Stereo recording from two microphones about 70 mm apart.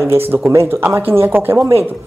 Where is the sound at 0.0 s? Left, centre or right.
Right.